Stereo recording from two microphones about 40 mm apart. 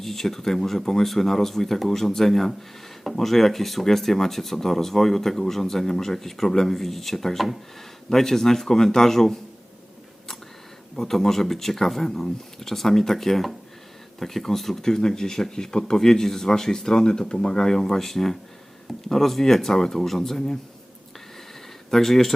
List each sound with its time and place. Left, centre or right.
0.0 s speech: centre
10.9 s speech: centre
21.8 s speech: centre